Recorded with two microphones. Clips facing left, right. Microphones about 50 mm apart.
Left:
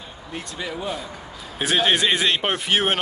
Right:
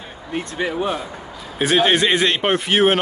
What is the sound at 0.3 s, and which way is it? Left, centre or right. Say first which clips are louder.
Speech: right 7 dB; right.